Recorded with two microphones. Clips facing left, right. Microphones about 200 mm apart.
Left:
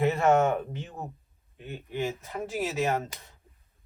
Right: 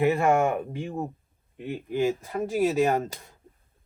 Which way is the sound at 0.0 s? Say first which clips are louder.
Right 1 dB; 15° right (ahead or behind).